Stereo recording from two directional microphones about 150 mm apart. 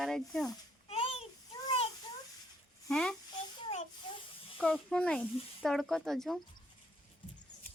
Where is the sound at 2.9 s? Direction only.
5° left (ahead or behind).